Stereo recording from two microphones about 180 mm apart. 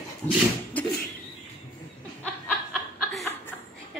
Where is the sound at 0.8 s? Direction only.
10° left (ahead or behind).